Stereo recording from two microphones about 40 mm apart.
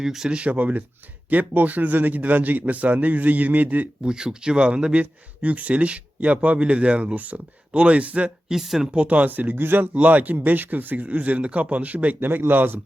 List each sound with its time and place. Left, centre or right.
0.0 s speech: centre
0.3 s a man's voice: right
4.0 s speech: centre
8.4 s speech: centre
9.0 s a man's voice: right
9.9 s speech: right
10.3 s speech: right
12.5 s a man's voice: right